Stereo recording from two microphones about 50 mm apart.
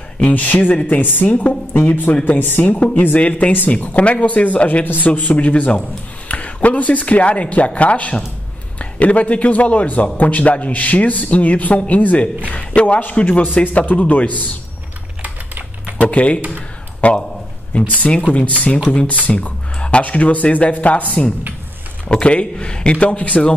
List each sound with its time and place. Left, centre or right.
0.2 s a woman's voice: left
2.6 s a man's voice: left
4.8 s a man's voice: left
16.0 s a man's voice: left